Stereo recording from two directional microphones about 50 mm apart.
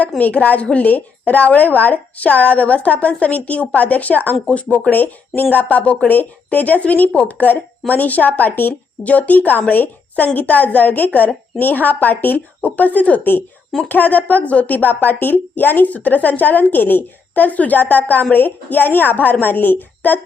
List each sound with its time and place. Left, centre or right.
0.2 s speech: left